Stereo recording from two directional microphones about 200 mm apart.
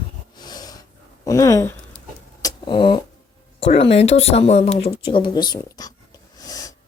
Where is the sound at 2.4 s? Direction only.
20° left (ahead or behind).